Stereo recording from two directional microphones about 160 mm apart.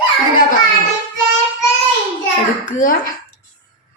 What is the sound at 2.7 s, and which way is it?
Speech, 60° left (ahead or behind).